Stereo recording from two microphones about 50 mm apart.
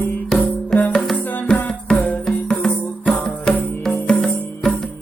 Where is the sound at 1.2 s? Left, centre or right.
Left.